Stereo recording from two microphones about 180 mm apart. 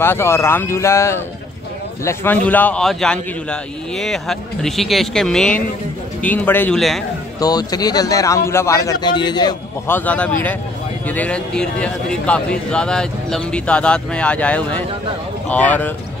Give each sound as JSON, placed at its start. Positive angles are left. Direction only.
{"t": 0.0, "sound": "a man's voice", "side_deg": 15}
{"t": 7.3, "sound": "speech", "side_deg": 20}
{"t": 9.8, "sound": "a man's voice", "side_deg": 10}